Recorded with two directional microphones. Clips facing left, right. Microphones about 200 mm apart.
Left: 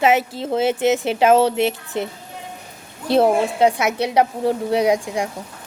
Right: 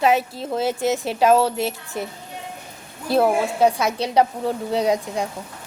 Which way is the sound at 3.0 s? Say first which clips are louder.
Left 3 dB; 25° left (ahead or behind).